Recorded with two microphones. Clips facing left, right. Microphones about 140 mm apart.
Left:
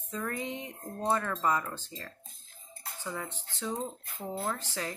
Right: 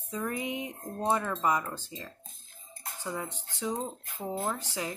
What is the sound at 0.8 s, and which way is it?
Chime, 30° right (ahead or behind).